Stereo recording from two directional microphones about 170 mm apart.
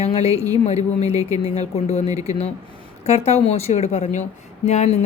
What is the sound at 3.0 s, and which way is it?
Speech, 40° left (ahead or behind).